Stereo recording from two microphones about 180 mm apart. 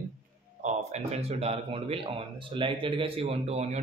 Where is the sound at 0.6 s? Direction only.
35° right (ahead or behind).